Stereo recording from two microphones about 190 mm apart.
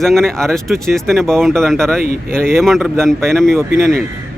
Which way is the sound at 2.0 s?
50° right (ahead or behind).